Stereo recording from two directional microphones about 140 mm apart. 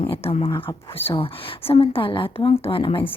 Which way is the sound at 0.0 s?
40° left (ahead or behind).